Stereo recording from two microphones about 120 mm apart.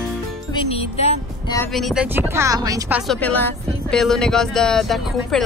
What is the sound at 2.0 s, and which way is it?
Speech, 20° right (ahead or behind).